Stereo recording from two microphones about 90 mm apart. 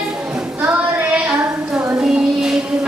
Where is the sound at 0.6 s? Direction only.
20° right (ahead or behind).